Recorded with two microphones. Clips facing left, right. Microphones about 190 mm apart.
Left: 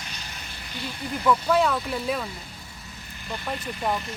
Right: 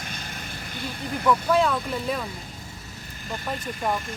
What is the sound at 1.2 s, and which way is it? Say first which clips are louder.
Speech: even; centre (ahead or behind).